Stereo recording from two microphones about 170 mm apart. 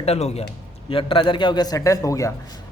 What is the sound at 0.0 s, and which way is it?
Speech, 35° left (ahead or behind).